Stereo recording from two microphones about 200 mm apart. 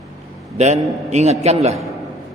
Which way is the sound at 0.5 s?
35° right (ahead or behind).